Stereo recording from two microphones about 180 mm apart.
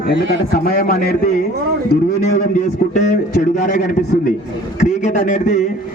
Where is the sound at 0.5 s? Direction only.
55° left (ahead or behind).